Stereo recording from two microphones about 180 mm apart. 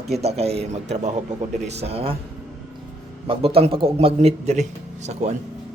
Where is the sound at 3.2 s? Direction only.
30° right (ahead or behind).